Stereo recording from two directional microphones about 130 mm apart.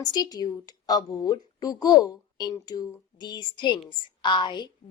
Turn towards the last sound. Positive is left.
turn(degrees=35)  # may be behind; listen again after turning